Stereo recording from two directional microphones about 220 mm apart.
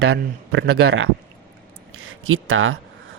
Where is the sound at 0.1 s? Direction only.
50° right (ahead or behind).